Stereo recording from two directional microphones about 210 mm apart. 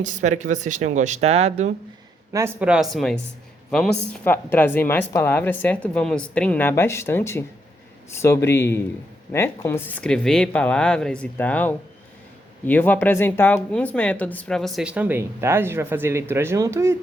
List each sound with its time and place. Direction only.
0.0 s speech: 35° right (ahead or behind)
2.3 s speech: 10° right (ahead or behind)